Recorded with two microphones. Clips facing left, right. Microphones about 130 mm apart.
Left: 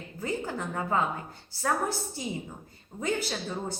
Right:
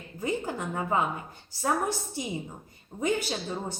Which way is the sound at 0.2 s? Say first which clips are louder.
Right 2 dB; 15° right (ahead or behind).